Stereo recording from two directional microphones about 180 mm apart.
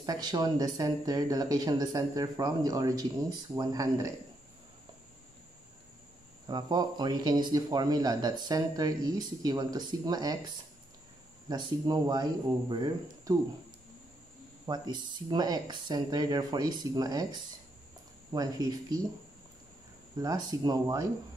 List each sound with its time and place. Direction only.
0.0 s speech: 20° right (ahead or behind)
6.4 s speech: 20° right (ahead or behind)
14.7 s speech: 25° right (ahead or behind)
20.2 s speech: 20° right (ahead or behind)